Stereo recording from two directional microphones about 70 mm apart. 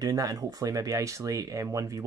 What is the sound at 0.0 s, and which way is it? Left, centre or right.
Speech, right.